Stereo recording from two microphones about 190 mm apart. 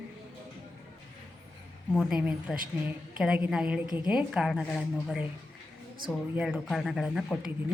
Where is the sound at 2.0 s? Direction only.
5° right (ahead or behind).